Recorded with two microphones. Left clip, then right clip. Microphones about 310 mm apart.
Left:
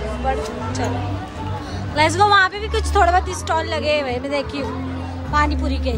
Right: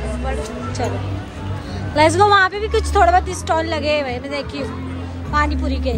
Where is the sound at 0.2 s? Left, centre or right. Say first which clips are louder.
Left 6 dB; left.